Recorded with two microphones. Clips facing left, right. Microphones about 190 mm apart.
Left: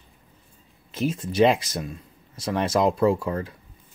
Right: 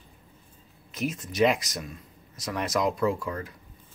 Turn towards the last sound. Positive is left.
turn(degrees=30)  # may be behind; listen again after turning